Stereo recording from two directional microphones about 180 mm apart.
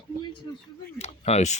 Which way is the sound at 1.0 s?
35° left (ahead or behind).